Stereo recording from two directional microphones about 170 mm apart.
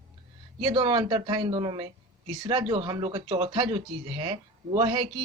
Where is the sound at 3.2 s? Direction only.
40° right (ahead or behind).